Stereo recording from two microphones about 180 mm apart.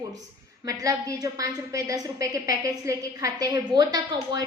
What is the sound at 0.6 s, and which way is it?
A woman's voice, 20° right (ahead or behind).